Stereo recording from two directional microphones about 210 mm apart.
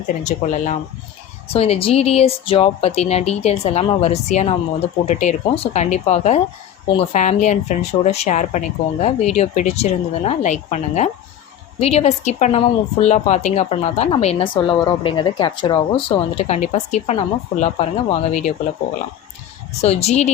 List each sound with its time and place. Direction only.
0.3 s speech: 35° left (ahead or behind)
19.8 s speech: 30° left (ahead or behind)